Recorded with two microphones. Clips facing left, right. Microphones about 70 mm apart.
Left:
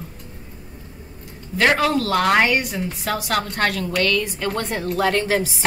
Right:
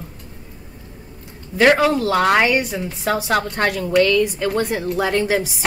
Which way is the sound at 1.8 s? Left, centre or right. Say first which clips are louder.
Right 2 dB; centre.